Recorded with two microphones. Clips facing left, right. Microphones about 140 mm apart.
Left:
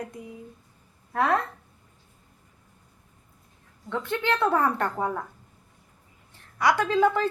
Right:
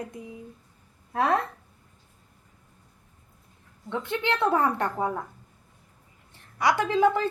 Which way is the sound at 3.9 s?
20° right (ahead or behind).